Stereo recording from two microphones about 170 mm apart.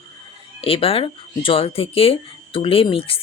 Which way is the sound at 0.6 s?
35° left (ahead or behind).